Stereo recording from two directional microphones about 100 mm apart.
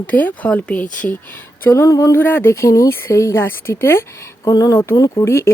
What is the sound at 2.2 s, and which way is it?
Speech, 20° left (ahead or behind).